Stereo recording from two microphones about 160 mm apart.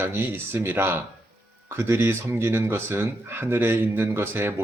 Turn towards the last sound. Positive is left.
turn(degrees=-15)  # may be behind; listen again after turning